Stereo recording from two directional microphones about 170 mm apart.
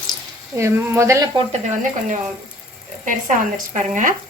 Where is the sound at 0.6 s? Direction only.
15° right (ahead or behind).